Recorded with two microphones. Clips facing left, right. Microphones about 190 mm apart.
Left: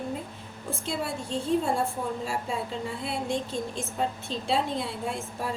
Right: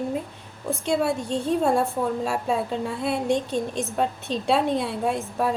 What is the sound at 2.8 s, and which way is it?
A woman's voice, 65° right (ahead or behind).